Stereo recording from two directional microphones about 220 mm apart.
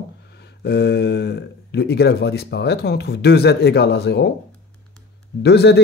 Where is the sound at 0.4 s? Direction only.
50° left (ahead or behind).